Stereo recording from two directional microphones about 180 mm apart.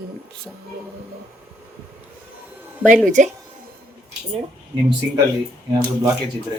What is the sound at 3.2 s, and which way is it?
Speech, 40° right (ahead or behind).